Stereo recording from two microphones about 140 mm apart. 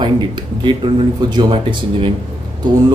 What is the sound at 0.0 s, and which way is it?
A man's voice, 35° right (ahead or behind).